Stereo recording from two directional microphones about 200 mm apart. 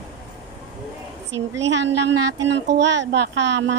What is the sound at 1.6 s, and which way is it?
A woman's voice, 60° right (ahead or behind).